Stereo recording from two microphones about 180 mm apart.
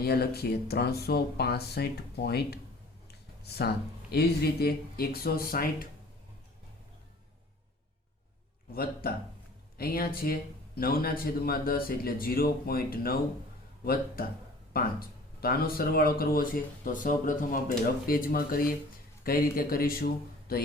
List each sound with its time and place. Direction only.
0.0 s a man's voice: 60° left (ahead or behind)
3.1 s a sound: 65° left (ahead or behind)
4.1 s a man's voice: 60° left (ahead or behind)
8.7 s a man's voice: 55° left (ahead or behind)